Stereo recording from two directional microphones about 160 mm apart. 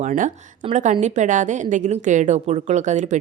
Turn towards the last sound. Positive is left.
turn(degrees=-50)  # may be behind; listen again after turning